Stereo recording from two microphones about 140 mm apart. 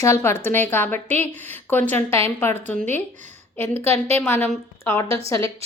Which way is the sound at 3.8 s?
50° right (ahead or behind).